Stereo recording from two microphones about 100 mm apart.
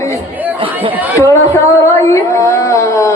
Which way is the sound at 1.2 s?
25° left (ahead or behind).